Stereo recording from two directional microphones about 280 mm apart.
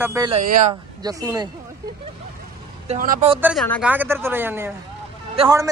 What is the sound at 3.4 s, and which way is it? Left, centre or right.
Speech, centre.